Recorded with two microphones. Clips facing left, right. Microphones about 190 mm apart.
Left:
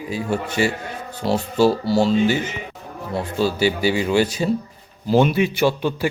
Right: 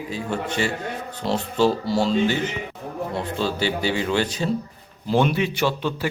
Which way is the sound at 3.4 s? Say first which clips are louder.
Left 6 dB; 10° left (ahead or behind).